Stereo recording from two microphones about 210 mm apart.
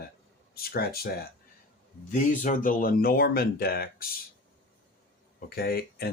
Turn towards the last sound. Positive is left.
turn(degrees=50)  # may be behind; listen again after turning